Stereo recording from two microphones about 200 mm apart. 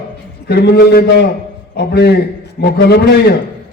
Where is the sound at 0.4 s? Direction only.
55° left (ahead or behind).